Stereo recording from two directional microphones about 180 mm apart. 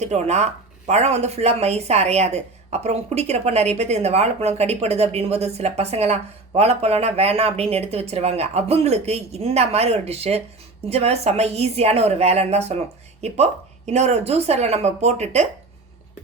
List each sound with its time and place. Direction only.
0.0 s speech: 40° right (ahead or behind)